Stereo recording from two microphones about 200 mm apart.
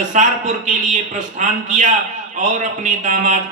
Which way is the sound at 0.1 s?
40° right (ahead or behind).